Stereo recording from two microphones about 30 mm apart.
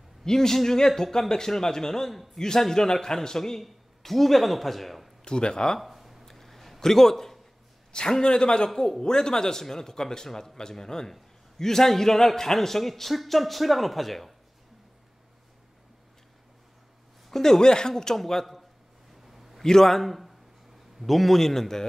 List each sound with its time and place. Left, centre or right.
0.2 s speech: centre
2.0 s a man's voice: centre
2.4 s a man's voice: centre
5.2 s speech: left
5.8 s a sound: centre
6.2 s a sound: centre
6.8 s a man's voice: centre
7.9 s speech: left
8.6 s a man's voice: centre
17.3 s speech: centre
18.1 s speech: centre
19.2 s a sound: centre
19.6 s a man's voice: centre
19.9 s a man's voice: centre